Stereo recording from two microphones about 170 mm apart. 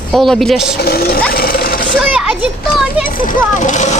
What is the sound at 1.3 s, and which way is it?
Sewing machine, 60° left (ahead or behind).